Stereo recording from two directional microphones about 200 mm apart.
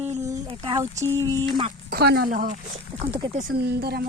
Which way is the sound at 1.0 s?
10° left (ahead or behind).